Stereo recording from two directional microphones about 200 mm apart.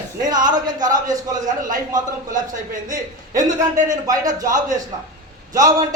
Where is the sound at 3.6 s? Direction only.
20° right (ahead or behind).